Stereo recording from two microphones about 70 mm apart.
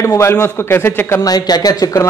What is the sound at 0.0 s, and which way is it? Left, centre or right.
A man's voice, left.